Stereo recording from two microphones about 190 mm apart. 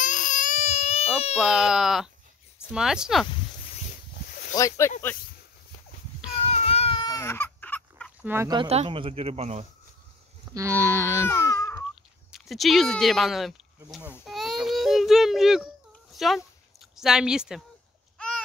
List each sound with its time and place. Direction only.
0.0 s baby cry: 45° left (ahead or behind)
1.3 s speech: 5° right (ahead or behind)
4.6 s speech: 15° left (ahead or behind)
6.5 s baby cry: 30° left (ahead or behind); by 8.1 s 10° left (ahead or behind)
8.2 s speech: 10° right (ahead or behind)
8.5 s speech: 30° right (ahead or behind)
10.5 s a sound: 15° right (ahead or behind)
11.2 s baby cry: 15° left (ahead or behind)
11.9 s a child's voice: centre (ahead or behind)